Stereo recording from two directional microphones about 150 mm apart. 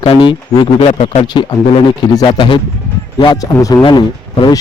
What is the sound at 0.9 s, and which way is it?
Speech, 50° left (ahead or behind).